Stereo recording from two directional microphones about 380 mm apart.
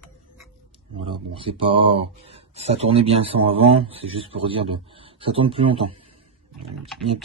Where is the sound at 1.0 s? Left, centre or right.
Centre.